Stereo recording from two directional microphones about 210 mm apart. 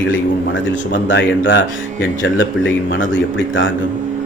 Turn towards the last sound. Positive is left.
turn(degrees=65)  # may be behind; listen again after turning